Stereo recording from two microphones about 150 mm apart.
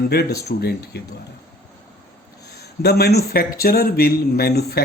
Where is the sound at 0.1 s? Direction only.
90° left.